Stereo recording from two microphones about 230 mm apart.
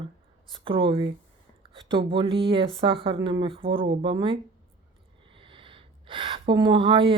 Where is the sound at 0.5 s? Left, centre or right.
Right.